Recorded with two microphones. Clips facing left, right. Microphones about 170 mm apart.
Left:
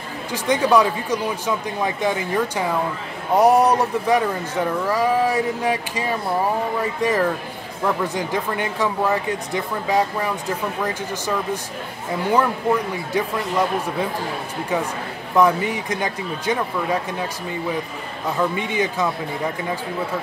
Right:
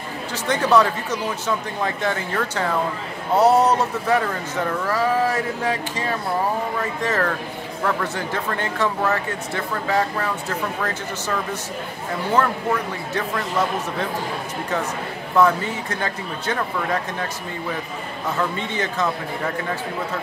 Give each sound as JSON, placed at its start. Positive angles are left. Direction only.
{"t": 0.3, "sound": "speech", "side_deg": 10}
{"t": 15.3, "sound": "speech", "side_deg": 15}